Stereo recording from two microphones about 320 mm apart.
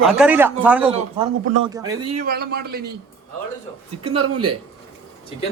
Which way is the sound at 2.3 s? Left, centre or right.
Right.